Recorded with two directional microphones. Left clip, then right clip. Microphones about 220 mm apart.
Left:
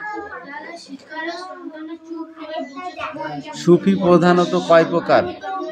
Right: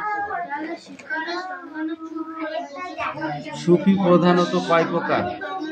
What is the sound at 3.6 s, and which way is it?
A man's voice, 30° left (ahead or behind).